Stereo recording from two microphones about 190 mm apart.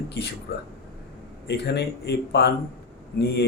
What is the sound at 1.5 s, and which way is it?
A man's voice, 60° left (ahead or behind).